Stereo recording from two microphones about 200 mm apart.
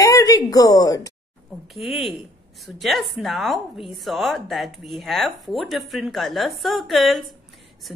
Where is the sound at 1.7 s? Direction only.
Centre (ahead or behind).